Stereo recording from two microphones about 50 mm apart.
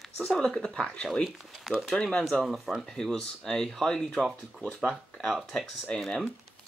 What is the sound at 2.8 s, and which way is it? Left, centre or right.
Speech, centre.